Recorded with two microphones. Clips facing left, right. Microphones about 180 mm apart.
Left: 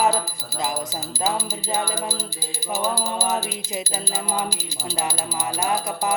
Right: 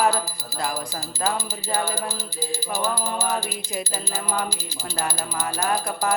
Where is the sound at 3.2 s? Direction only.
20° left (ahead or behind).